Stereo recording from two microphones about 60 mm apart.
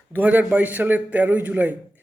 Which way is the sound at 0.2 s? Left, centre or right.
Right.